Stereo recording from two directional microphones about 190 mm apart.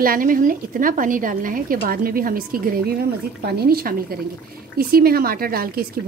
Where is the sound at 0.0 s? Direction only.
50° right (ahead or behind).